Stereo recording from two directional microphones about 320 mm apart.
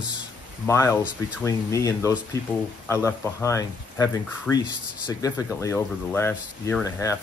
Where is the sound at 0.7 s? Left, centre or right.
Centre.